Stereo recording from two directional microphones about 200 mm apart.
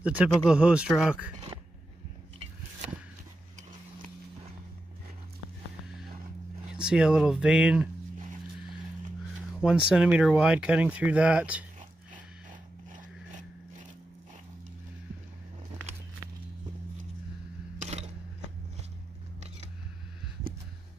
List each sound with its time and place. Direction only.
0.0 s speech: 5° right (ahead or behind)
6.7 s speech: 5° right (ahead or behind)
9.6 s speech: 5° right (ahead or behind)
17.7 s a sound: 35° right (ahead or behind)